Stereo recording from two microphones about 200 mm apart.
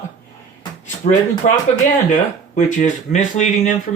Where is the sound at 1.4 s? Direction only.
35° left (ahead or behind).